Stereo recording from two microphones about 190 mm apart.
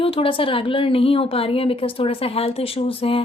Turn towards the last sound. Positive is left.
turn(degrees=30)  # may be behind; listen again after turning